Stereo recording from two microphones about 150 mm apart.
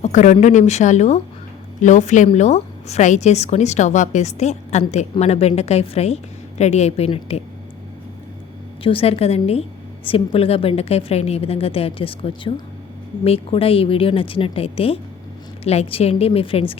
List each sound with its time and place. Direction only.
0.0 s a woman's voice: 55° left (ahead or behind)
8.8 s a woman's voice: 40° left (ahead or behind)